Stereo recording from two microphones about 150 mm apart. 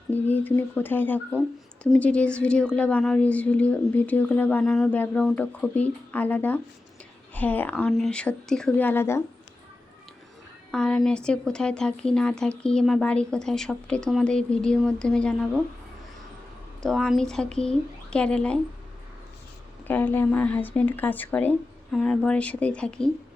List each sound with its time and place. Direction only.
0.1 s a woman's voice: 10° left (ahead or behind)
10.7 s speech: 5° left (ahead or behind)
16.8 s speech: 5° left (ahead or behind)
19.9 s a woman's voice: 10° left (ahead or behind)